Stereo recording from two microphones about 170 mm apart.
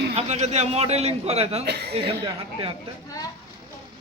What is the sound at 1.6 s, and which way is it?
Speech, 75° right (ahead or behind).